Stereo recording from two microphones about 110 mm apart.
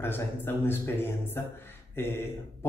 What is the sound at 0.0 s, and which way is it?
A man's voice, 20° left (ahead or behind).